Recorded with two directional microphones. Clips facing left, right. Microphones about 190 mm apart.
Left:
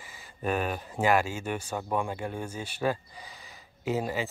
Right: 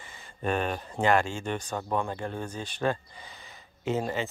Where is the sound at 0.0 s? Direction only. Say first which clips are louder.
Right 1 dB; 5° left (ahead or behind).